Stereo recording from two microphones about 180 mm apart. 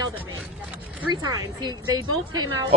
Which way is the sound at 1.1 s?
20° right (ahead or behind).